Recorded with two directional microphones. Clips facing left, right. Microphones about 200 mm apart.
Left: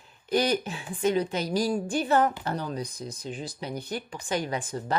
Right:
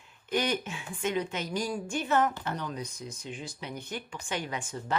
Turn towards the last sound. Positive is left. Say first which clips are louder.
# left 5 dB
turn(degrees=35)  # may be behind; listen again after turning